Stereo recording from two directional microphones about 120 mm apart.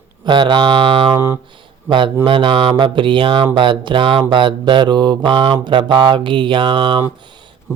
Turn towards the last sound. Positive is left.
turn(degrees=-45)  # may be behind; listen again after turning